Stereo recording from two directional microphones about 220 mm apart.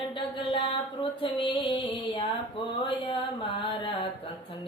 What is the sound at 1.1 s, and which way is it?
Music, 25° left (ahead or behind).